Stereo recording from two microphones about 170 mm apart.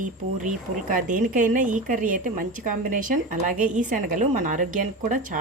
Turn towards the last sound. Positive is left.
turn(degrees=-50)  # may be behind; listen again after turning